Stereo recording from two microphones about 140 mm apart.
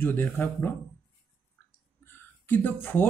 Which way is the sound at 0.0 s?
15° left (ahead or behind).